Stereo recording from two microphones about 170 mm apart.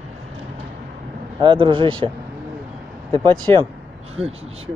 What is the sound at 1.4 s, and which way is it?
Speech, 30° right (ahead or behind).